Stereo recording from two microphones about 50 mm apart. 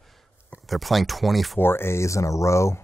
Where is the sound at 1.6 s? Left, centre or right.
Left.